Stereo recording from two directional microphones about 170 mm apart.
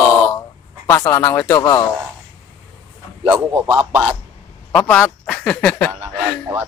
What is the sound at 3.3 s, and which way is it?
Speech, 10° right (ahead or behind).